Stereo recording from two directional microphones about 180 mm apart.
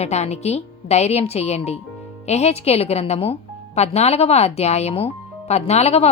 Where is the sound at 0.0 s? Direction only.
35° left (ahead or behind).